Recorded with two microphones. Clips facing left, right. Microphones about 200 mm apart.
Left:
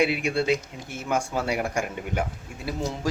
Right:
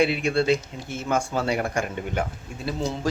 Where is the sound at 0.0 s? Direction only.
10° left (ahead or behind).